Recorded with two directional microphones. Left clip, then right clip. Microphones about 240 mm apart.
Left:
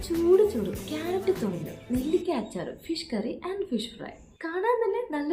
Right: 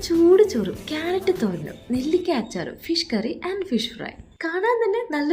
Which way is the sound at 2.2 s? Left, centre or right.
Right.